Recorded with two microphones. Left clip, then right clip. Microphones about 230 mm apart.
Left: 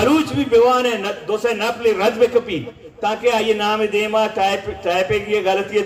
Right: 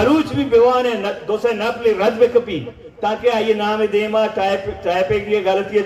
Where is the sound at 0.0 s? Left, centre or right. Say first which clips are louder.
Right 1 dB; left.